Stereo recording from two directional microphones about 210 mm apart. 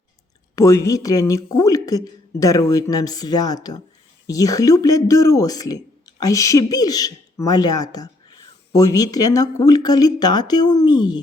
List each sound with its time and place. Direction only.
0.5 s speech: 15° left (ahead or behind)